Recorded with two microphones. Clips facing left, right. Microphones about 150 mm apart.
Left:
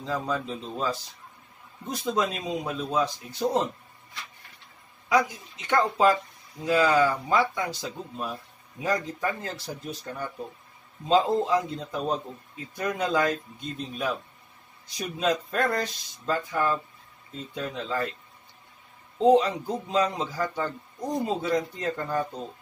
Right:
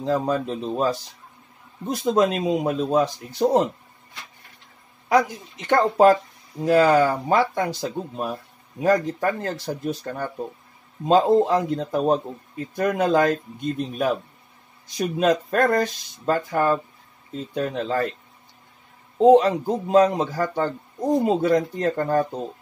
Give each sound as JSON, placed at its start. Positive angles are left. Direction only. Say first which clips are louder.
{"t": 0.0, "sound": "speech", "louder": "right 7 dB", "side_deg": -50}
{"t": 2.2, "sound": "speech", "louder": "right 9 dB", "side_deg": -50}
{"t": 5.1, "sound": "speech", "louder": "right 4 dB", "side_deg": -55}
{"t": 19.1, "sound": "speech", "louder": "right 6 dB", "side_deg": -55}